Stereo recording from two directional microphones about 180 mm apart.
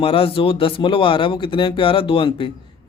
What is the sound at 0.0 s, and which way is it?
A man's voice, 30° left (ahead or behind).